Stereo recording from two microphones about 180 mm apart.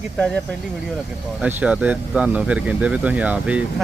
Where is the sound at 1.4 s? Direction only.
10° right (ahead or behind).